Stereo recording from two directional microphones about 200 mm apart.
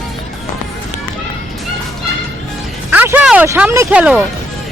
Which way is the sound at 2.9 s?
10° right (ahead or behind).